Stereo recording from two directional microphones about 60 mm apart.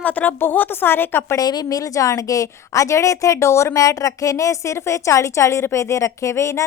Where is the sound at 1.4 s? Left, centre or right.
Left.